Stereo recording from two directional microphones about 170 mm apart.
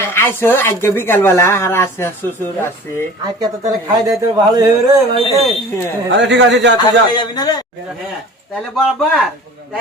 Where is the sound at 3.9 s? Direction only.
25° right (ahead or behind).